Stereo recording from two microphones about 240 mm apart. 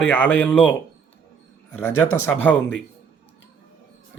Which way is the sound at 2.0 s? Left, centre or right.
Centre.